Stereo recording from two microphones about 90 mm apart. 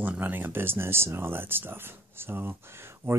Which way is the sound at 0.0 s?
20° right (ahead or behind).